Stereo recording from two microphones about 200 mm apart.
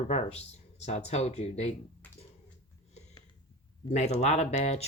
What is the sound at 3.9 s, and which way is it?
Speech, 35° left (ahead or behind).